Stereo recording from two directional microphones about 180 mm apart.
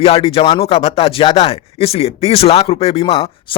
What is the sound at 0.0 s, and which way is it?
Speech, 35° left (ahead or behind).